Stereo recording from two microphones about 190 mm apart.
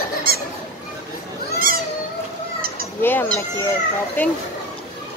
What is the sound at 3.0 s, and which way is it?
Speech, 10° left (ahead or behind).